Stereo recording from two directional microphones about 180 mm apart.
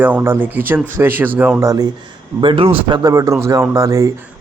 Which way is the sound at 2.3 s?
30° right (ahead or behind).